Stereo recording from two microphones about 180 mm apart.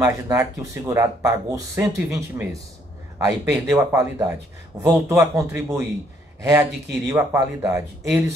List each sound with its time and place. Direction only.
0.0 s speech: 20° right (ahead or behind)